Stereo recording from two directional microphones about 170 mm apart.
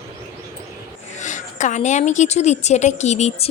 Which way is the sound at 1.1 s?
45° left (ahead or behind).